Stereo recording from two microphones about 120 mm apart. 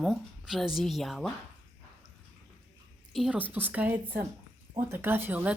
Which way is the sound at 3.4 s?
15° right (ahead or behind).